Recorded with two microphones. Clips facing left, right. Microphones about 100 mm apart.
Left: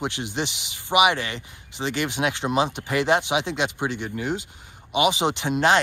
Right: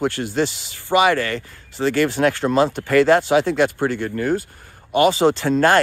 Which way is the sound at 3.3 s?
50° right (ahead or behind).